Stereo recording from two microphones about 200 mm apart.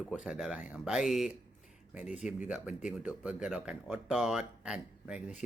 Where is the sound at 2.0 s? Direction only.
35° left (ahead or behind).